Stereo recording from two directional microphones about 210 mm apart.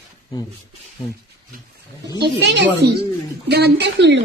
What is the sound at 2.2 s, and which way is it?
A woman's voice, 55° right (ahead or behind).